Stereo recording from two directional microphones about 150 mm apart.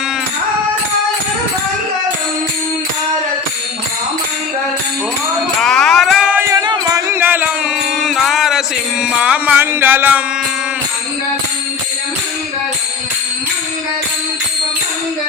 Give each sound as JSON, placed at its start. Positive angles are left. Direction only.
{"t": 5.5, "sound": "a sound", "side_deg": 5}
{"t": 6.5, "sound": "music", "side_deg": -25}
{"t": 7.1, "sound": "music", "side_deg": -15}
{"t": 7.9, "sound": "music", "side_deg": 0}